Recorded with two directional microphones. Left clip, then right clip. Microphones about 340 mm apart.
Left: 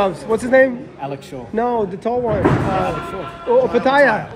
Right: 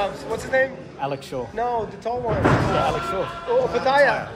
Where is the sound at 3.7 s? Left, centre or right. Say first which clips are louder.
Left 2 dB; centre.